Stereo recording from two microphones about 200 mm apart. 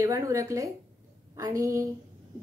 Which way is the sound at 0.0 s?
15° right (ahead or behind).